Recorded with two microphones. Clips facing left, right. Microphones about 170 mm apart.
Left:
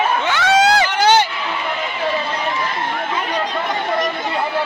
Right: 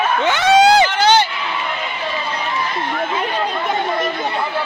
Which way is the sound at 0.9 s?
10° left (ahead or behind).